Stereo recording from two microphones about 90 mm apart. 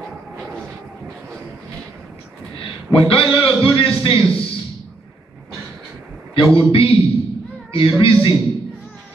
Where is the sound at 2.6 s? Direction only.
80° left.